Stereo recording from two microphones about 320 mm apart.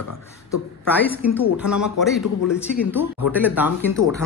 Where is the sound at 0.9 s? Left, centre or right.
Centre.